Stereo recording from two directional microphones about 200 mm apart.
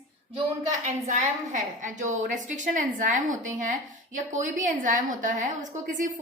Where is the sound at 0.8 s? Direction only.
40° right (ahead or behind).